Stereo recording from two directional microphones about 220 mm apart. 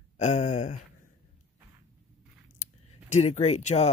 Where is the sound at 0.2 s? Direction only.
30° left (ahead or behind).